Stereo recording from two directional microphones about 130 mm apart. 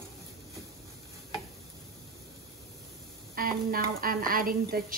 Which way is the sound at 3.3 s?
90° right.